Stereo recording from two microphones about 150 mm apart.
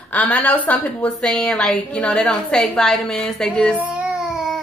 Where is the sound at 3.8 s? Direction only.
10° right (ahead or behind).